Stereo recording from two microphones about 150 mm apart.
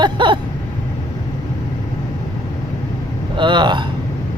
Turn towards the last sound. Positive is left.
turn(degrees=-30)  # may be behind; listen again after turning